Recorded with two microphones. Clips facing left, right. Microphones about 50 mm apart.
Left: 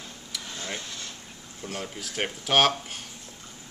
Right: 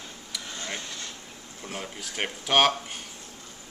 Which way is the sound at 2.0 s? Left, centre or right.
Centre.